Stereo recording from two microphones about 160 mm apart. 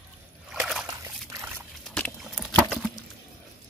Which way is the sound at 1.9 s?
5° left (ahead or behind).